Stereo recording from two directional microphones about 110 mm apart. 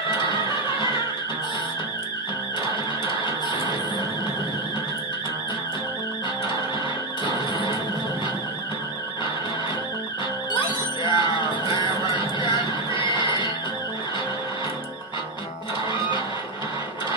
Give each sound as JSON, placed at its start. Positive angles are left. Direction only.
{"t": 10.5, "sound": "music", "side_deg": 45}